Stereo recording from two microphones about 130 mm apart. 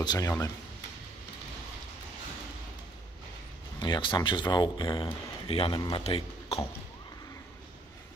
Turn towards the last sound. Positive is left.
turn(degrees=50)  # may be behind; listen again after turning